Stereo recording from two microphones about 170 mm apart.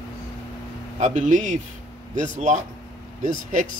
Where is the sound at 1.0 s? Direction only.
45° right (ahead or behind).